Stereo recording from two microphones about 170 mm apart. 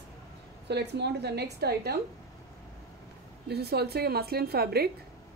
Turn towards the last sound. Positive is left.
turn(degrees=-65)  # may be behind; listen again after turning